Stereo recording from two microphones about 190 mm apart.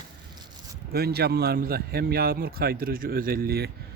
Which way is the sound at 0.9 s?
55° right (ahead or behind).